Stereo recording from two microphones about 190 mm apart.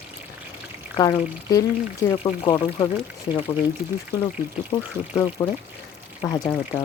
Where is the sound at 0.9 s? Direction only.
20° left (ahead or behind).